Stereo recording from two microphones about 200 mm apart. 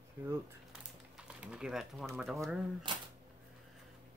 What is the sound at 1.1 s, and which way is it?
Speech, 5° right (ahead or behind).